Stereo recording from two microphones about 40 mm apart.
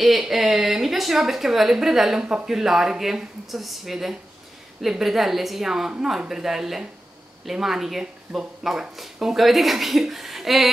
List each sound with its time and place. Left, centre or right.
0.0 s speech: centre
8.0 s speech: centre
8.9 s speech: centre